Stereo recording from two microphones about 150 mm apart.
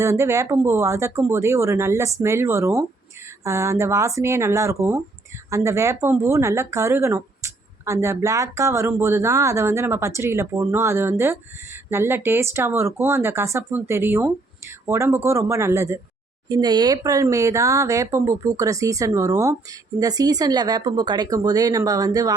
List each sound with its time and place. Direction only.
0.0 s speech: 20° right (ahead or behind)